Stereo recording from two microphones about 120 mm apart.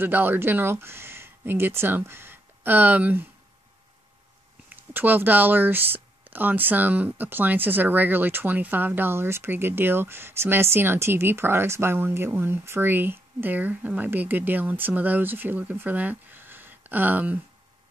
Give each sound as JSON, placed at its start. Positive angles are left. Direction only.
{"t": 0.0, "sound": "speech", "side_deg": -15}
{"t": 4.9, "sound": "speech", "side_deg": -15}